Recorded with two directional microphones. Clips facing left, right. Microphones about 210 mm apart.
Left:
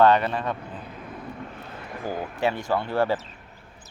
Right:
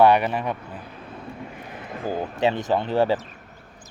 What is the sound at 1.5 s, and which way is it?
Speech, 15° right (ahead or behind).